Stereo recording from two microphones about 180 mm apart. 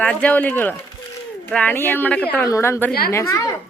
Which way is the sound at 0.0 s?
5° left (ahead or behind).